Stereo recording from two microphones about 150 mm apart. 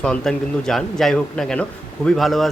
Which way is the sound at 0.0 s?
5° left (ahead or behind).